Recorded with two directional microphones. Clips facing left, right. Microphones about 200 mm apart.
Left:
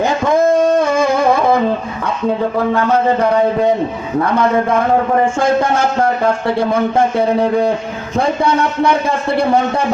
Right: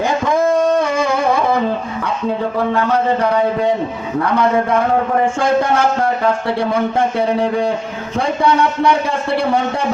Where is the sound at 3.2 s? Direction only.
45° left (ahead or behind).